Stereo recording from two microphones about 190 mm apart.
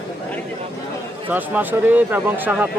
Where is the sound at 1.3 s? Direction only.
10° right (ahead or behind).